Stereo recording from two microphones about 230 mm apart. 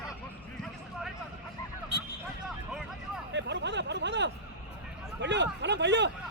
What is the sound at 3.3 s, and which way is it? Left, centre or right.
Speech, right.